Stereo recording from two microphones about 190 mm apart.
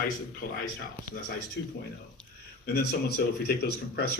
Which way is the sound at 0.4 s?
50° left (ahead or behind).